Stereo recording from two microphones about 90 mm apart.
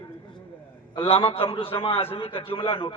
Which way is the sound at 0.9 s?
75° left (ahead or behind).